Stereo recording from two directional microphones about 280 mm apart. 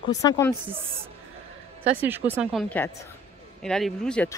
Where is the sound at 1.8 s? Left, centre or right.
Centre.